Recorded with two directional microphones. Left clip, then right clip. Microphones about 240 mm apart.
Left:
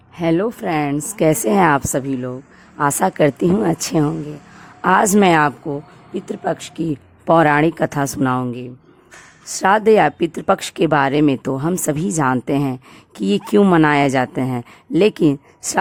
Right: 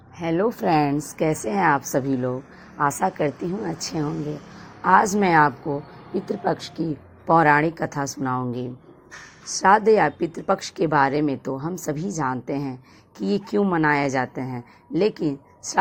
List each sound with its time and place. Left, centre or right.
0.2 s a woman's voice: left
0.6 s speech: centre
1.2 s a woman's voice: left
1.9 s speech: centre
2.7 s a woman's voice: left
7.3 s a woman's voice: left
9.6 s a woman's voice: left